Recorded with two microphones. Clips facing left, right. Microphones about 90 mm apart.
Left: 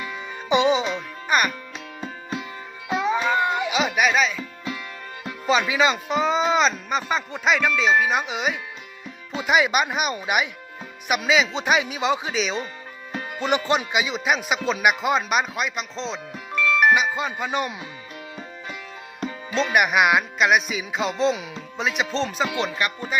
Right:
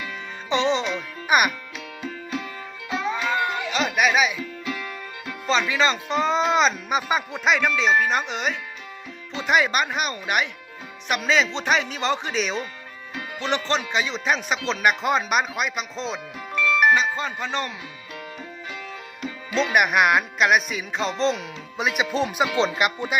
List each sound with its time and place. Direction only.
0.0 s music: 15° left (ahead or behind)
1.3 s a child's voice: 15° right (ahead or behind)
2.9 s music: 20° left (ahead or behind); by 4.4 s 5° right (ahead or behind)
5.5 s speech: 10° left (ahead or behind)
13.4 s speech: 15° left (ahead or behind); by 16.2 s 5° right (ahead or behind)
16.9 s speech: 10° left (ahead or behind)
19.5 s speech: centre (ahead or behind); by 23.1 s 20° right (ahead or behind)